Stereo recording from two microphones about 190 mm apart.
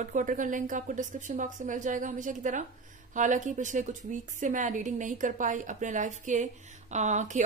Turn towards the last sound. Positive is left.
turn(degrees=-40)  # may be behind; listen again after turning